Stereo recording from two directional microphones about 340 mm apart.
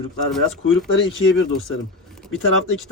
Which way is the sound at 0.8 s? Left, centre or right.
Left.